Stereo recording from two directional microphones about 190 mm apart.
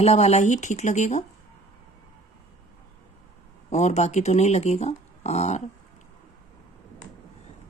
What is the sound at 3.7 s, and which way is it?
Speech, 35° left (ahead or behind).